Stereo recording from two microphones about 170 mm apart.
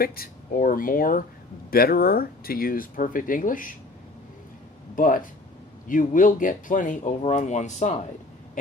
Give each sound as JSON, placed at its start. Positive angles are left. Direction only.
{"t": 0.0, "sound": "speech", "side_deg": 60}
{"t": 4.9, "sound": "speech", "side_deg": 55}